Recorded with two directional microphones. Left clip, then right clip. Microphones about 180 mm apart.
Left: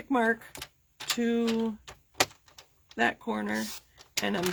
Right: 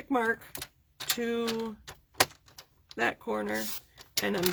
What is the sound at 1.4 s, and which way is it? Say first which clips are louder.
Speech: left 3 dB; 10° left (ahead or behind).